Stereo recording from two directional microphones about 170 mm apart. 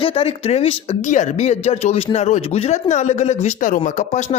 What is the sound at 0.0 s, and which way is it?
Speech, 35° left (ahead or behind).